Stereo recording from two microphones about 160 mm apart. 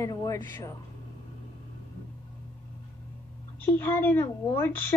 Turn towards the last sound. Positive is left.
turn(degrees=15)  # may be behind; listen again after turning